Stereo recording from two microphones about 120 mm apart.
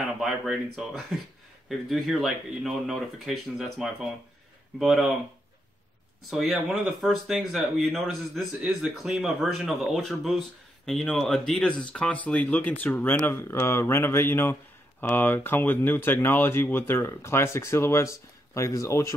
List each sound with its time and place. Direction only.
0.2 s speech: 5° right (ahead or behind)
6.3 s speech: 5° right (ahead or behind); by 19.1 s 25° left (ahead or behind)